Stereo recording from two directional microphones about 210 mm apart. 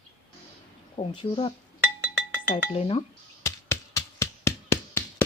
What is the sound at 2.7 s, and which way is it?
Speech, 25° left (ahead or behind).